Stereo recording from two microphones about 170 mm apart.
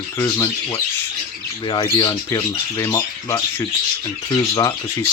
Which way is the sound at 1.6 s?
25° left (ahead or behind).